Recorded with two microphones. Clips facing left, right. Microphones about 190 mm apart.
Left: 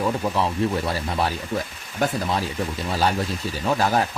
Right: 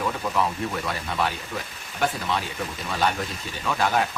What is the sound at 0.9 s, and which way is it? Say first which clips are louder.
A man's voice: left 3 dB; 35° left (ahead or behind).